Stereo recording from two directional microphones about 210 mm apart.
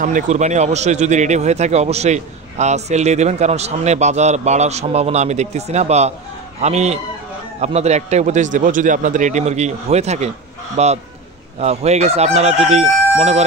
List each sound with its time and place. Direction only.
0.0 s a man's voice: 35° right (ahead or behind)